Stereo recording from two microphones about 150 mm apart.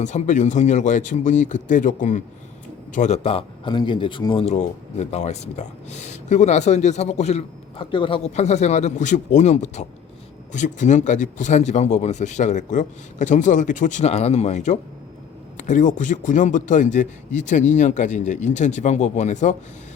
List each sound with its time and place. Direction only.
0.0 s a man's voice: 55° left (ahead or behind)
3.2 s speech: 35° left (ahead or behind)
4.4 s speech: 45° left (ahead or behind)
8.4 s a man's voice: 50° left (ahead or behind)